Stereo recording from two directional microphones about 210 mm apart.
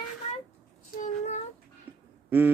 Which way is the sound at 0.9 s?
35° left (ahead or behind).